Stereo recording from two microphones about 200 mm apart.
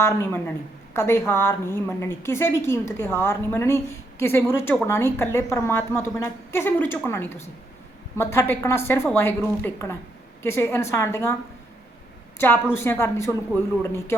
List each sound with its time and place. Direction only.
0.0 s a woman's voice: 10° left (ahead or behind)
12.4 s a woman's voice: 10° left (ahead or behind)